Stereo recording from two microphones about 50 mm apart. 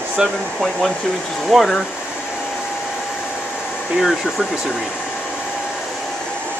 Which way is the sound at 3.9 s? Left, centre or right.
Centre.